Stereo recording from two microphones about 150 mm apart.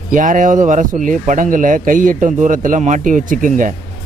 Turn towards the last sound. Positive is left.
turn(degrees=-60)  # may be behind; listen again after turning